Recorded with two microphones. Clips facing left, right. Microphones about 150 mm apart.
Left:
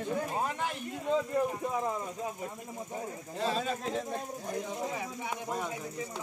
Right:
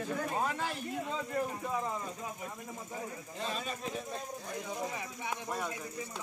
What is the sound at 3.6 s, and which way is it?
Speech, 90° left.